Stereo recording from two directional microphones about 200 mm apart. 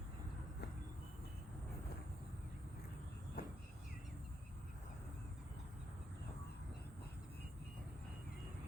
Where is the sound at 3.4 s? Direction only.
45° left (ahead or behind).